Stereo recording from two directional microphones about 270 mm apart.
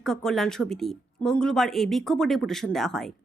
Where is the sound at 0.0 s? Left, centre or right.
Centre.